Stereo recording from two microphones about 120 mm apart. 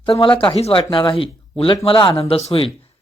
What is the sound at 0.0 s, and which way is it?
Speech, 45° left (ahead or behind).